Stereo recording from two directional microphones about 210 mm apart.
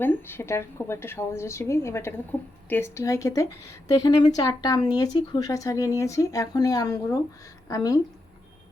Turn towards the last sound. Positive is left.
turn(degrees=15)  # may be behind; listen again after turning